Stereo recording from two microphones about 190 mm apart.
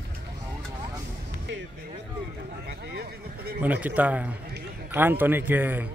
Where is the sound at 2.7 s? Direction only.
55° right (ahead or behind).